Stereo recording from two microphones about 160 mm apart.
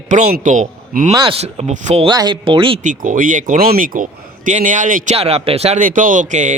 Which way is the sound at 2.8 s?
55° right (ahead or behind).